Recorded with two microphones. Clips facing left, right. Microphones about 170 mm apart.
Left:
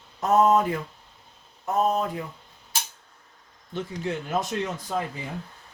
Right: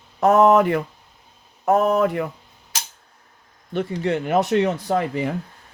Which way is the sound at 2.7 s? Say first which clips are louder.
Even; 90° right.